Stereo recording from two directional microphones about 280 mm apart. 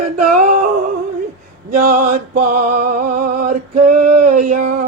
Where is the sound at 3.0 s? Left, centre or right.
Right.